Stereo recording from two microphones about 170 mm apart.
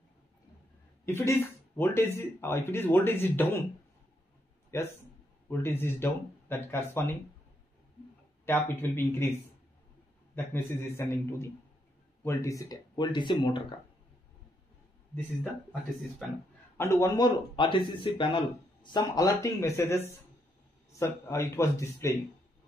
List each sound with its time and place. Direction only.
1.0 s speech: 15° left (ahead or behind)
4.7 s speech: 15° left (ahead or behind)
8.5 s speech: 15° left (ahead or behind)
10.3 s speech: 15° left (ahead or behind)
16.7 s speech: 15° left (ahead or behind)
21.0 s speech: 15° left (ahead or behind)